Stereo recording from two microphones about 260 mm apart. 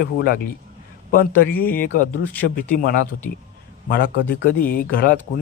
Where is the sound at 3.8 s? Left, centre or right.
Left.